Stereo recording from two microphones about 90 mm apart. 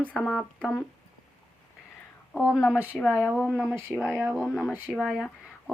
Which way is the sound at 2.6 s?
25° left (ahead or behind).